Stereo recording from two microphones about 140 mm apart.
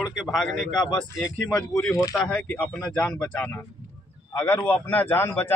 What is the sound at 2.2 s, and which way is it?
Speech, 5° left (ahead or behind).